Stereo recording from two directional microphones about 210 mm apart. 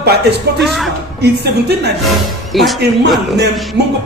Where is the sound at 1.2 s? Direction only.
50° right (ahead or behind).